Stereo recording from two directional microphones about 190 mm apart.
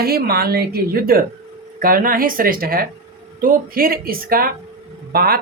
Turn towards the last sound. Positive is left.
turn(degrees=-50)  # may be behind; listen again after turning